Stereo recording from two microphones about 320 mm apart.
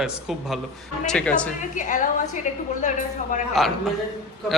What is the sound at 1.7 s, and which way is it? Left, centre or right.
A woman's voice, left.